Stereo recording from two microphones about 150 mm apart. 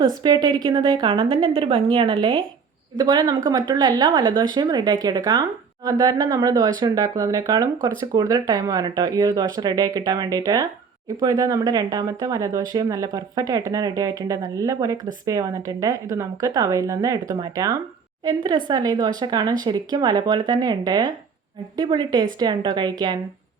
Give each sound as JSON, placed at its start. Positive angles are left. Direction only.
{"t": 0.2, "sound": "a woman's voice", "side_deg": -30}